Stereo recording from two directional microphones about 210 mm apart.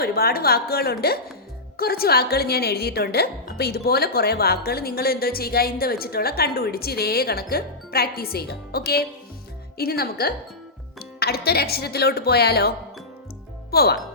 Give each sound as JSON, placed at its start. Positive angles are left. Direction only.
{"t": 0.0, "sound": "speech", "side_deg": 45}